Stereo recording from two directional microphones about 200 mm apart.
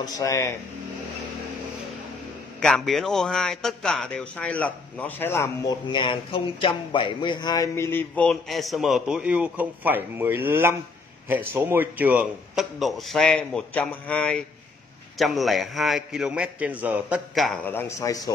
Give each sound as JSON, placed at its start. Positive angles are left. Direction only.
{"t": 0.0, "sound": "a man's voice", "side_deg": 15}
{"t": 2.6, "sound": "a man's voice", "side_deg": 0}